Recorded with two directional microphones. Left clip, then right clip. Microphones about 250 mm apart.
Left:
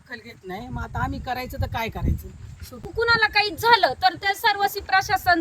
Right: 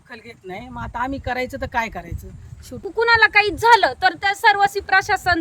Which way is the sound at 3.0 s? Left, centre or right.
Right.